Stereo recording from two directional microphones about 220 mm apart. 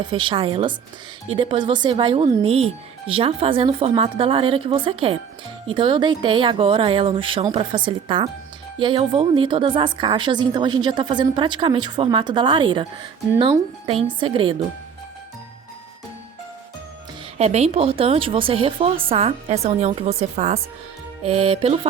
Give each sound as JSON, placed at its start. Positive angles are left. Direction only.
{"t": 0.0, "sound": "a woman's voice", "side_deg": -25}
{"t": 17.3, "sound": "a woman's voice", "side_deg": -30}